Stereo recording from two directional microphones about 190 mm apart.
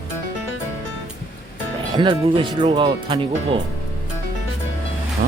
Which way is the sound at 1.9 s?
25° right (ahead or behind).